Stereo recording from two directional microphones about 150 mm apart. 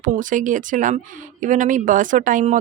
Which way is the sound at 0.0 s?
60° right (ahead or behind).